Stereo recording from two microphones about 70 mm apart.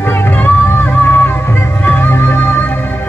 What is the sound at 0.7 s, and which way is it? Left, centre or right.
Music, left.